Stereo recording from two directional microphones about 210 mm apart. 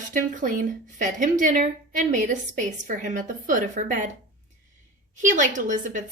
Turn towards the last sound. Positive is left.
turn(degrees=-35)  # may be behind; listen again after turning